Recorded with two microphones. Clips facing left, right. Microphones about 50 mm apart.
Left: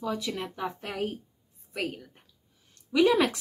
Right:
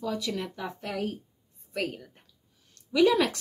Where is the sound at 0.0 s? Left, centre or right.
Centre.